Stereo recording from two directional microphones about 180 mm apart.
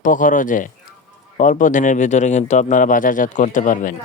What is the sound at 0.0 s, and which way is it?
Speech, 45° left (ahead or behind).